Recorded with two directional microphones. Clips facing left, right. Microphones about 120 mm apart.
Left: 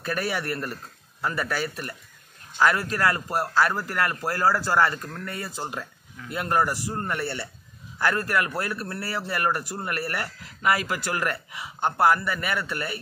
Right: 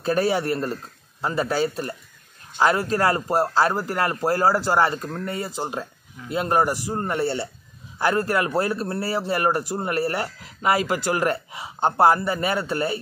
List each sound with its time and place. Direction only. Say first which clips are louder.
0.0 s a man's voice: right 7 dB; 25° right (ahead or behind)